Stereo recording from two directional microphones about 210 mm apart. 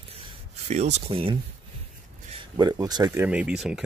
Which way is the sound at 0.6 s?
30° right (ahead or behind).